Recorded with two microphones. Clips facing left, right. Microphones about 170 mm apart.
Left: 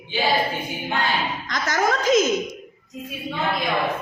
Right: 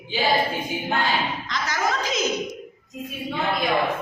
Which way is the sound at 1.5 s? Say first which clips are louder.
Left 4 dB; 45° left (ahead or behind).